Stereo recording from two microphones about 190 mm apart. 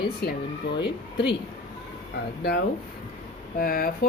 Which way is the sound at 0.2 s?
55° left (ahead or behind).